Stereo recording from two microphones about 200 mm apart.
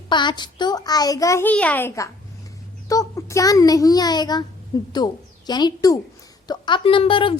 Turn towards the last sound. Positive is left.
turn(degrees=25)  # may be behind; listen again after turning